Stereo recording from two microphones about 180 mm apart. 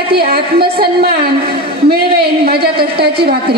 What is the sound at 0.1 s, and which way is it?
A woman's voice, 60° right (ahead or behind).